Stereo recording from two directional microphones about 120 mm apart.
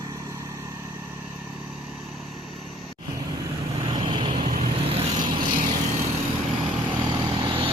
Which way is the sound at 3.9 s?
40° right (ahead or behind).